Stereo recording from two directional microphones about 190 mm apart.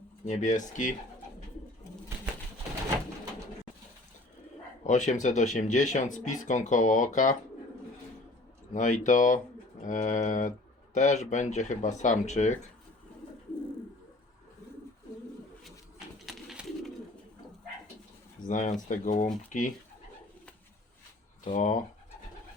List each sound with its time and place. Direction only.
0.3 s speech: 40° left (ahead or behind)
4.8 s speech: 40° left (ahead or behind)
8.7 s speech: 40° left (ahead or behind)
16.0 s bird: centre (ahead or behind)
18.4 s speech: 40° left (ahead or behind)
21.4 s speech: 40° left (ahead or behind)